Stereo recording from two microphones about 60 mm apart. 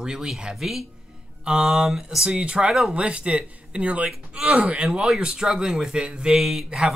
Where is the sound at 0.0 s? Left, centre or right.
Centre.